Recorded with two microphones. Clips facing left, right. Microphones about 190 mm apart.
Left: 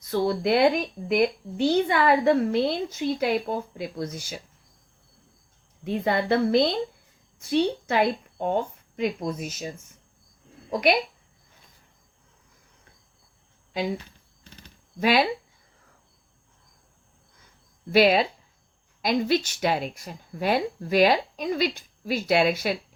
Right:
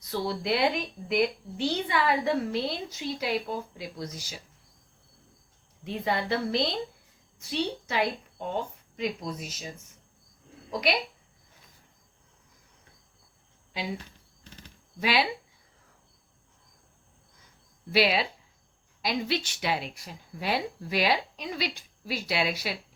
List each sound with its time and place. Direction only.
0.0 s a woman's voice: 50° left (ahead or behind)
5.8 s a woman's voice: 55° left (ahead or behind)
10.7 s speech: 55° left (ahead or behind)
13.7 s a woman's voice: 50° left (ahead or behind)
15.0 s a woman's voice: 45° left (ahead or behind)
17.9 s a woman's voice: 45° left (ahead or behind)